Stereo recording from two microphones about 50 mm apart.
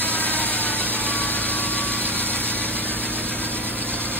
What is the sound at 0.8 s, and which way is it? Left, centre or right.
Vehicle, right.